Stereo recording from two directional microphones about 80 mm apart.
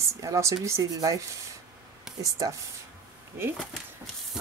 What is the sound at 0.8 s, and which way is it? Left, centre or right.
Speech, right.